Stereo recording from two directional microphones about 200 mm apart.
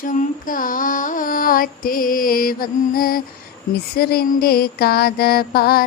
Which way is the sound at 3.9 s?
50° left (ahead or behind).